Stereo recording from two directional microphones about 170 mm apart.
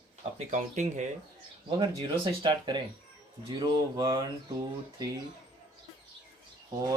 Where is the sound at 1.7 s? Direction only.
25° right (ahead or behind).